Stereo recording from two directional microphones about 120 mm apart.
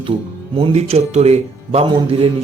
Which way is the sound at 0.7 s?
60° right (ahead or behind).